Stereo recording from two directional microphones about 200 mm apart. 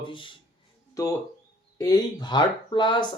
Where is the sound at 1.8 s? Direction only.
20° left (ahead or behind).